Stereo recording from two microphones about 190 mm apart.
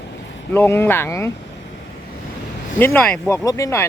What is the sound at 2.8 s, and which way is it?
Speech, 10° left (ahead or behind).